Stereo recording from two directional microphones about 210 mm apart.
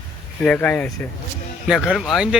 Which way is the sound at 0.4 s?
5° left (ahead or behind).